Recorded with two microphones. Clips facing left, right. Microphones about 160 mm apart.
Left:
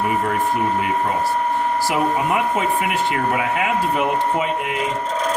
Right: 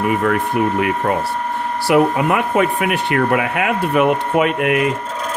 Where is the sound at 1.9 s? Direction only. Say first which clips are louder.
Right 9 dB; 65° right (ahead or behind).